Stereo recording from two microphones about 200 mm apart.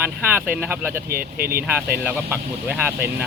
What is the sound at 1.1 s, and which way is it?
Speech, 50° right (ahead or behind).